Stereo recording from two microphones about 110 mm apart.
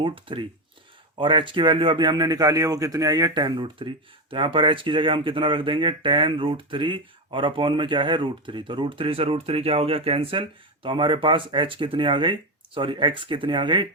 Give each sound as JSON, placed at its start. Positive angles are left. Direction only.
{"t": 0.0, "sound": "a man's voice", "side_deg": -50}